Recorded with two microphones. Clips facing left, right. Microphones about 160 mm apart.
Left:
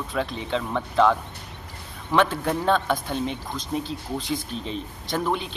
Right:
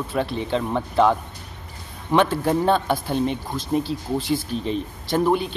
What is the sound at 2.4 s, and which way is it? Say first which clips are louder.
Speech: right 3 dB; 30° right (ahead or behind).